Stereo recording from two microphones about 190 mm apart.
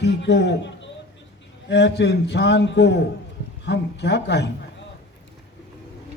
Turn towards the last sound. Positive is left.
turn(degrees=65)  # may be behind; listen again after turning